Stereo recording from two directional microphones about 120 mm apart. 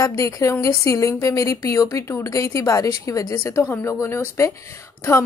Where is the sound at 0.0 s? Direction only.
25° left (ahead or behind).